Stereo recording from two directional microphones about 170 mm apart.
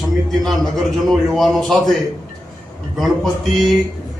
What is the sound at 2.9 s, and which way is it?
Speech, centre (ahead or behind).